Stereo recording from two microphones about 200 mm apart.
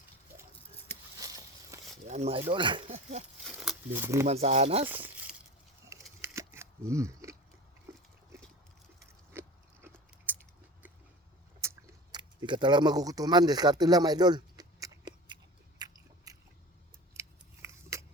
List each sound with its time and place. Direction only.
1.2 s a sound: 15° right (ahead or behind)
2.0 s speech: 35° right (ahead or behind)
3.4 s speech: centre (ahead or behind)
4.3 s speech: 35° right (ahead or behind)
4.9 s a sound: 10° right (ahead or behind)
9.3 s biting: 10° right (ahead or behind)
12.1 s speech: 20° right (ahead or behind)
15.8 s biting: 20° right (ahead or behind)
17.2 s scissors: 15° right (ahead or behind)